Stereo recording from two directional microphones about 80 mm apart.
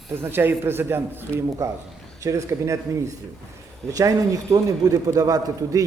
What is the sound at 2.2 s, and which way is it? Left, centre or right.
A man's voice, right.